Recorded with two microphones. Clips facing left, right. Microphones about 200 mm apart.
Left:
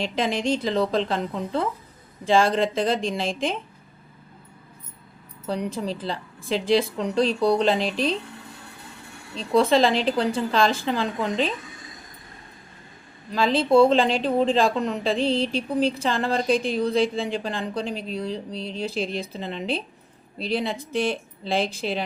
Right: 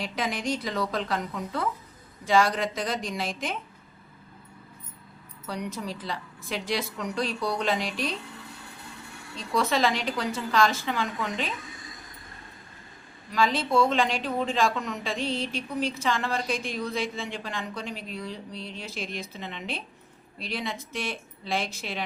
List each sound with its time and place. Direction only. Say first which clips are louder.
0.0 s a woman's voice: left 6 dB; 25° left (ahead or behind)
5.5 s a woman's voice: left 6 dB; 30° left (ahead or behind)
9.3 s a woman's voice: left 7 dB; 30° left (ahead or behind)
13.3 s a woman's voice: left 6 dB; 30° left (ahead or behind)